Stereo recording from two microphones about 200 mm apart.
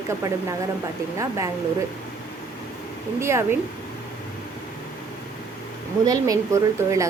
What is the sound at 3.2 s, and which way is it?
Speech, 15° right (ahead or behind).